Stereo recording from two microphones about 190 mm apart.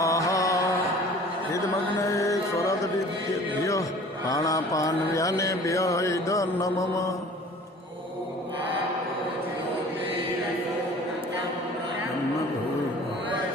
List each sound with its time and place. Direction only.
0.0 s music: 15° left (ahead or behind)
2.0 s music: 15° left (ahead or behind)
3.6 s mantra: 15° left (ahead or behind)